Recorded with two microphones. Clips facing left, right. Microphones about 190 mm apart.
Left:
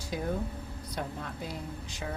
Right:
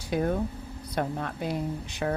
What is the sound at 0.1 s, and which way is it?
A woman's voice, 65° right (ahead or behind).